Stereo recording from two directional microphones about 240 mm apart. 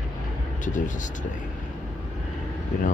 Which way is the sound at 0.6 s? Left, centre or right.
Left.